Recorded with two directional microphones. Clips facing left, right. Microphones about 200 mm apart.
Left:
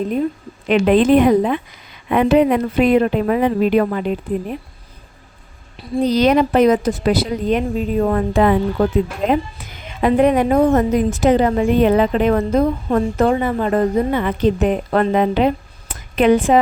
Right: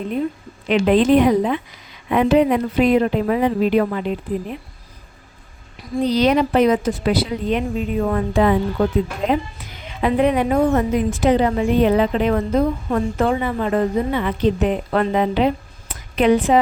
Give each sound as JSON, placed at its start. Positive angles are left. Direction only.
{"t": 0.7, "sound": "a woman's voice", "side_deg": 55}
{"t": 6.0, "sound": "a woman's voice", "side_deg": 45}
{"t": 10.0, "sound": "a woman's voice", "side_deg": 45}